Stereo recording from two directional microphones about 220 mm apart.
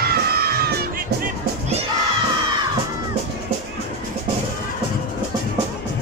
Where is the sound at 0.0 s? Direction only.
45° right (ahead or behind).